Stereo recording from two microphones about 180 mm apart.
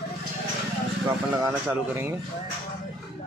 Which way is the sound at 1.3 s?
10° right (ahead or behind).